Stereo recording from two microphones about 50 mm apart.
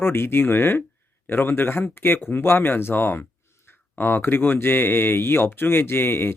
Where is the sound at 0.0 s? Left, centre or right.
Left.